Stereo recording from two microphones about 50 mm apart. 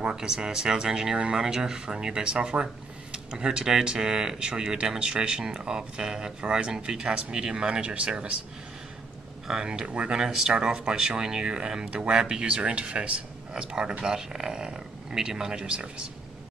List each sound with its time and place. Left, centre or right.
0.1 s speech: centre
9.5 s speech: centre
10.2 s speech: centre